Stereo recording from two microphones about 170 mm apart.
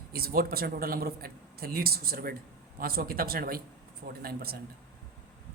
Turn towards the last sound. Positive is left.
turn(degrees=-65)  # may be behind; listen again after turning